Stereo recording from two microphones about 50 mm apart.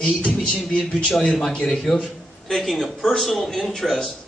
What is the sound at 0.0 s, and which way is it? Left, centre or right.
Music, left.